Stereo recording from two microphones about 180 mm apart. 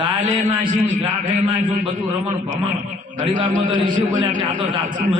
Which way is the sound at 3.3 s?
45° right (ahead or behind).